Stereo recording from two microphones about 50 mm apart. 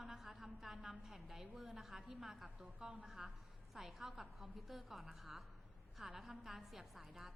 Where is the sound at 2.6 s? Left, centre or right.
Centre.